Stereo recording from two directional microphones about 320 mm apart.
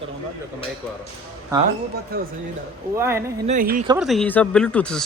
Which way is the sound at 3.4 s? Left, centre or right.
Right.